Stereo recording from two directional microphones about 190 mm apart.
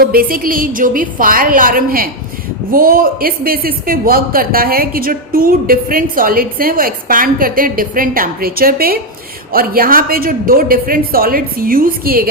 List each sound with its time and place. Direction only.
0.0 s speech: 50° right (ahead or behind)